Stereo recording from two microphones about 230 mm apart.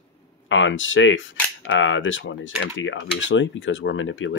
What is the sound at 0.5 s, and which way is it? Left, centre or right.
Speech, left.